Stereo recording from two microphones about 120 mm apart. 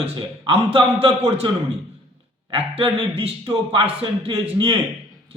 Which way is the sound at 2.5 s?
50° right (ahead or behind).